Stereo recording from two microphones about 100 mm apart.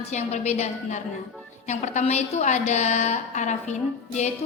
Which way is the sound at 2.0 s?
90° left.